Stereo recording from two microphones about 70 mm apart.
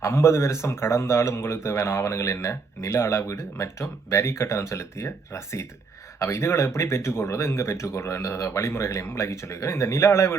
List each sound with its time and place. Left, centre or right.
0.0 s a man's voice: left